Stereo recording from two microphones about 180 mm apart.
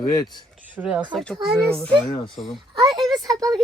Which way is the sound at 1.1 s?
5° left (ahead or behind).